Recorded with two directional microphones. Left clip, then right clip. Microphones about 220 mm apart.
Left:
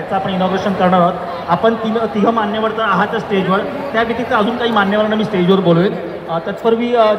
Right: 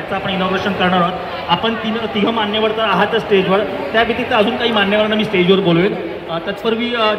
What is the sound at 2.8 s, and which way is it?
A man's voice, 45° right (ahead or behind).